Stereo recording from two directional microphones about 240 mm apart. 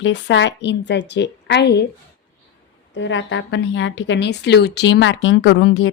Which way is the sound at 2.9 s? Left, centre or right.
Left.